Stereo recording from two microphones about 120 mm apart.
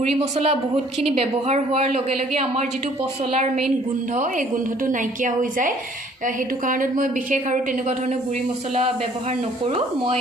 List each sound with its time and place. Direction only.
0.0 s a woman's voice: 55° right (ahead or behind)
4.1 s a woman's voice: 90° right
9.6 s speech: 50° right (ahead or behind)